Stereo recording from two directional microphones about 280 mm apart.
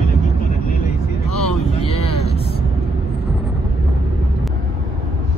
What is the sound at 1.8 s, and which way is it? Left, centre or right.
Vehicle, left.